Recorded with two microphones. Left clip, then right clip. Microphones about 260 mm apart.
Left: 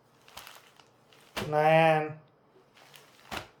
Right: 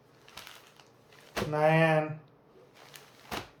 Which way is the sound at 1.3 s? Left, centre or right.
Centre.